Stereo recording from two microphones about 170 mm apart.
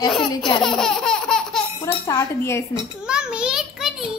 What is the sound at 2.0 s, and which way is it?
Speech, 20° left (ahead or behind).